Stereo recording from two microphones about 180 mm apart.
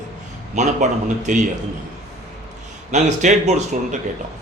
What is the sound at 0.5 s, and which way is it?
Speech, 40° right (ahead or behind).